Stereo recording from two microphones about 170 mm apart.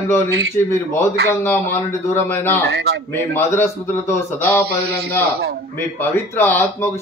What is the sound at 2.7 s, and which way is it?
Speech, 80° right.